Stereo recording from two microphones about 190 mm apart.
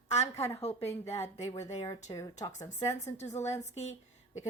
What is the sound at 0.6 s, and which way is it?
Speech, 35° left (ahead or behind).